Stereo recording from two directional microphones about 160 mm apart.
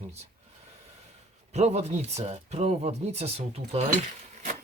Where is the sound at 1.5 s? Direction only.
45° right (ahead or behind).